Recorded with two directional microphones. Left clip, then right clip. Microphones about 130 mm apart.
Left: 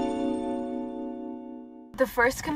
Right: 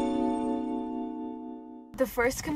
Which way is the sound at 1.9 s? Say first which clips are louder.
Left 4 dB; 20° right (ahead or behind).